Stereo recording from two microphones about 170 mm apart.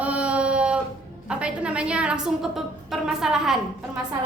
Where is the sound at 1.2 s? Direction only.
5° right (ahead or behind).